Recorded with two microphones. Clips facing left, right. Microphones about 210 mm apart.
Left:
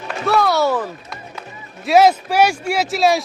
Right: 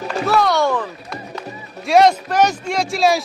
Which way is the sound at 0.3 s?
Centre (ahead or behind).